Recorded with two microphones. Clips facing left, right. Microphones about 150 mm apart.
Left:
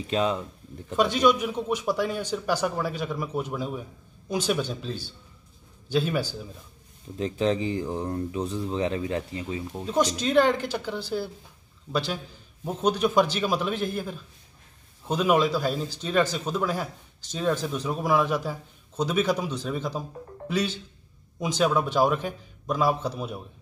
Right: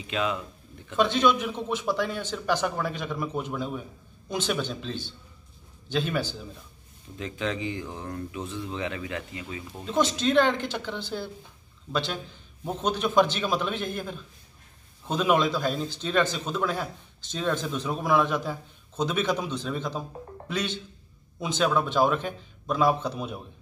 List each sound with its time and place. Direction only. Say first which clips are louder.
0.0 s speech: left 4 dB; 35° left (ahead or behind)
0.9 s a man's voice: left 1 dB; 10° left (ahead or behind)
7.2 s speech: left 6 dB; 35° left (ahead or behind)
9.8 s a man's voice: even; 10° left (ahead or behind)